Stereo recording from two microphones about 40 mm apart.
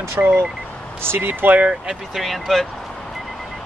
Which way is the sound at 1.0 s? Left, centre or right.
Right.